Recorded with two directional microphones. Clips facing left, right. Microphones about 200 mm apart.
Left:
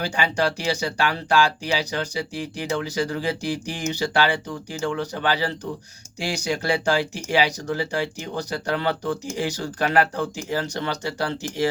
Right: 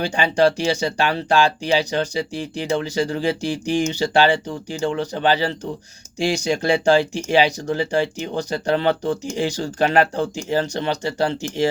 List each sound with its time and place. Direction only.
0.0 s speech: 25° right (ahead or behind)